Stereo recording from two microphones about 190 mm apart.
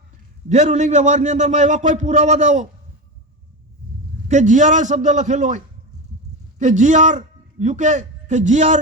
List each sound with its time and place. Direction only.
0.4 s a man's voice: 40° right (ahead or behind)
4.3 s a man's voice: 40° right (ahead or behind)